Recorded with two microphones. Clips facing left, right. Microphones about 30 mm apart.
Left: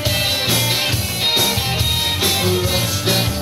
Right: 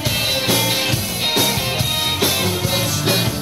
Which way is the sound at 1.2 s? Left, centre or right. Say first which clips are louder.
Left 1 dB; centre.